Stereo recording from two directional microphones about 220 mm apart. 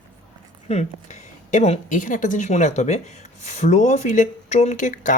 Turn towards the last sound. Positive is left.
turn(degrees=35)  # may be behind; listen again after turning